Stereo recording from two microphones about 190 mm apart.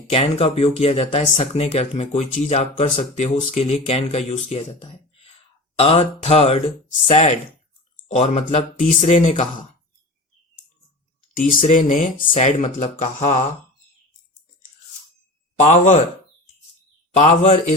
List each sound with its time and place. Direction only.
0.1 s speech: 30° left (ahead or behind)
11.3 s speech: 45° left (ahead or behind)
15.5 s speech: 40° left (ahead or behind)
17.2 s speech: 40° left (ahead or behind)